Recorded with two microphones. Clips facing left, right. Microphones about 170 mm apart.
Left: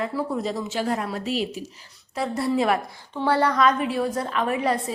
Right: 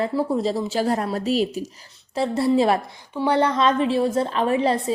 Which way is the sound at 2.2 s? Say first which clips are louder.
Right 4 dB; 30° right (ahead or behind).